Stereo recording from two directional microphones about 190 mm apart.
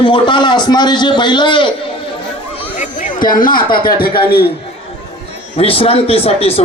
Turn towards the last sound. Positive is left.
turn(degrees=30)  # may be behind; listen again after turning